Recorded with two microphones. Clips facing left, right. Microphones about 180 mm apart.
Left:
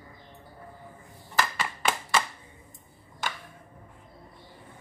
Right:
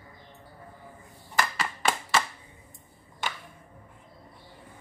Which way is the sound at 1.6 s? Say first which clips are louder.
Right 1 dB; 5° left (ahead or behind).